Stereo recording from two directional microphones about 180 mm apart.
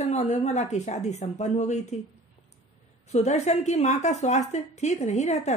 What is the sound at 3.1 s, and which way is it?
A woman's voice, 40° left (ahead or behind).